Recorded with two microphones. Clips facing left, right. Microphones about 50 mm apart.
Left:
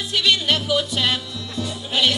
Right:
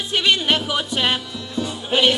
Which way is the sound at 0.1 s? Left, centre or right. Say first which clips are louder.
Right 1 dB; right.